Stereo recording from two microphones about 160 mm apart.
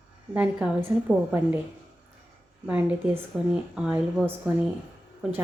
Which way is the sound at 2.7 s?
10° right (ahead or behind).